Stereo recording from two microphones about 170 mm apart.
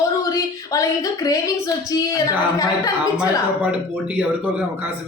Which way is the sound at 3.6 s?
10° right (ahead or behind).